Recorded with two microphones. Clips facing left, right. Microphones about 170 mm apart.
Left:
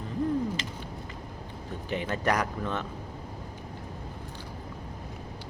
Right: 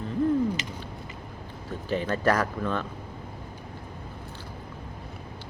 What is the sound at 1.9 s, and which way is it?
Speech, 20° left (ahead or behind).